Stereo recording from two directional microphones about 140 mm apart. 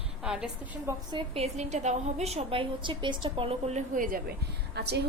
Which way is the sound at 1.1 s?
45° right (ahead or behind).